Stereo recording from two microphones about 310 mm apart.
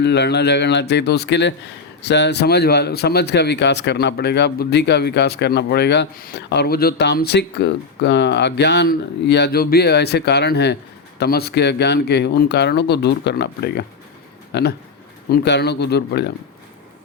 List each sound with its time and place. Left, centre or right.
0.0 s speech: left